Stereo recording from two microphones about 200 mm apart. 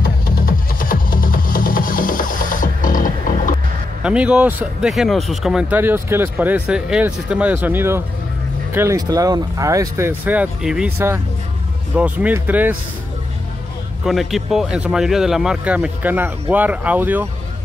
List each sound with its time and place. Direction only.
0.0 s music: 45° left (ahead or behind)
4.0 s speech: 5° right (ahead or behind)
14.0 s speech: centre (ahead or behind)